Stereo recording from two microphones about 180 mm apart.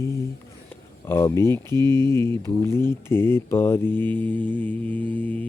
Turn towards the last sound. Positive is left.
turn(degrees=10)  # may be behind; listen again after turning